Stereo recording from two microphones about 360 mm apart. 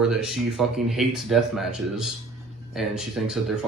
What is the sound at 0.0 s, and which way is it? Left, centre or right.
Speech, centre.